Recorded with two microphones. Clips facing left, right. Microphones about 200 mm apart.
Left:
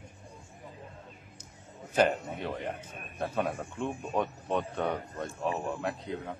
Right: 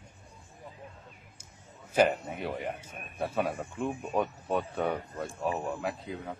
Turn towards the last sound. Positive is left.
turn(degrees=0)  # may be behind; listen again after turning